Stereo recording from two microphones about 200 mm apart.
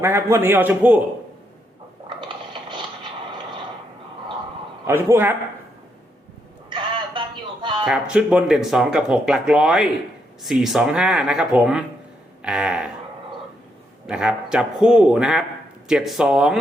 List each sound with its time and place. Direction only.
0.0 s a man's voice: 10° right (ahead or behind)
2.0 s a sound: 25° right (ahead or behind)
4.9 s a man's voice: 10° right (ahead or behind)
6.7 s a sound: 25° right (ahead or behind)
7.9 s speech: 5° right (ahead or behind)
14.1 s speech: 5° right (ahead or behind)